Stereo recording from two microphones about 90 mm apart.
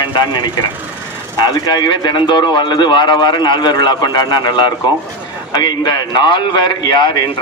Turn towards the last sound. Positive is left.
turn(degrees=55)  # may be behind; listen again after turning